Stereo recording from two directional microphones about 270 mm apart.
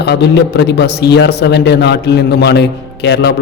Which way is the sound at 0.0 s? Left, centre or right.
Left.